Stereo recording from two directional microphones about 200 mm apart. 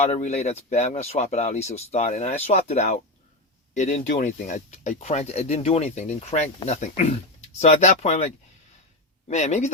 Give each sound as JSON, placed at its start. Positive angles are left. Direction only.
{"t": 0.0, "sound": "speech", "side_deg": 35}